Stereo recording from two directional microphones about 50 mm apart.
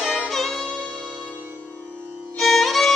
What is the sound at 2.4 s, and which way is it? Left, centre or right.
Music, centre.